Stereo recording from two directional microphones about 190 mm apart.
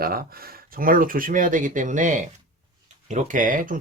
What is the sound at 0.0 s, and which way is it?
Speech, 50° right (ahead or behind).